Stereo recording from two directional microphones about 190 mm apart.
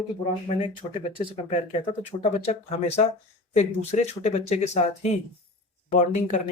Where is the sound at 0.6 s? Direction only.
30° left (ahead or behind).